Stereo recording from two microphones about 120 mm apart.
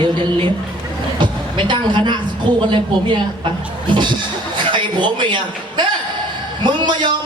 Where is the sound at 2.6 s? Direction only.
40° right (ahead or behind).